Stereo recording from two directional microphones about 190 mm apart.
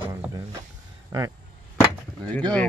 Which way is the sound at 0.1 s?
15° right (ahead or behind).